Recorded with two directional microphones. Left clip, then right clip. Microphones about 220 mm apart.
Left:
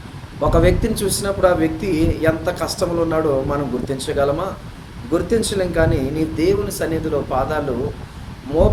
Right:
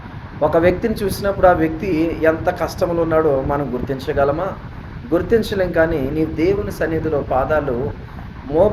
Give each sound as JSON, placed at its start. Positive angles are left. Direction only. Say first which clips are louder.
{"t": 0.5, "sound": "speech", "louder": "right 1 dB", "side_deg": 15}